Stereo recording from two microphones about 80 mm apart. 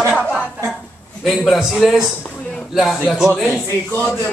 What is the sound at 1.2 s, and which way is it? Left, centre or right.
Speech, centre.